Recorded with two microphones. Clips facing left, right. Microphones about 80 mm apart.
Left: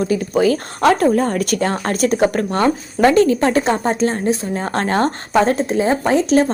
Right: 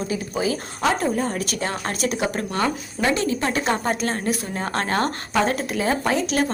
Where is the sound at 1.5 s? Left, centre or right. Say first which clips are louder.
Left 8 dB; left.